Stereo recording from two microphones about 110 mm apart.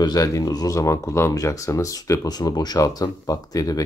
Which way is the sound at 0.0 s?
35° left (ahead or behind).